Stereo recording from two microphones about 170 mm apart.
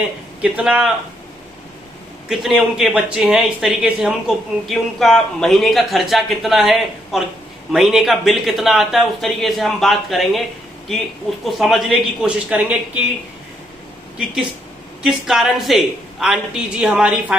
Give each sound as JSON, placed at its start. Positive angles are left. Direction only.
{"t": 0.4, "sound": "speech", "side_deg": -5}
{"t": 2.3, "sound": "speech", "side_deg": 0}
{"t": 11.4, "sound": "speech", "side_deg": 0}
{"t": 15.0, "sound": "speech", "side_deg": -5}